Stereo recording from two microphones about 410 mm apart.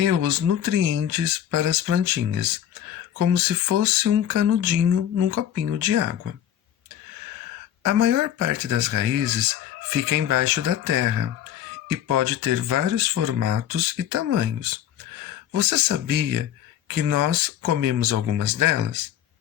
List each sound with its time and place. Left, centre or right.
0.0 s speech: right
7.9 s speech: right